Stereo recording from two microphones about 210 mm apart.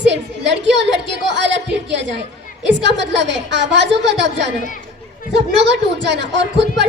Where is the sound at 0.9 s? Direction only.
55° right (ahead or behind).